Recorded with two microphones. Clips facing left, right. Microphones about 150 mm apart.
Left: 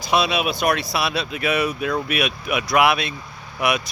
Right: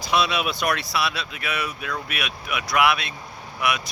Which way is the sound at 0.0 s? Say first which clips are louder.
Left 3 dB; 15° left (ahead or behind).